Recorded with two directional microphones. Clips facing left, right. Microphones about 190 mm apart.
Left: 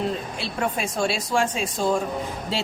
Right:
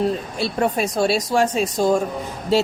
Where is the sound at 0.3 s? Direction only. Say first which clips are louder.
Right 6 dB; 40° right (ahead or behind).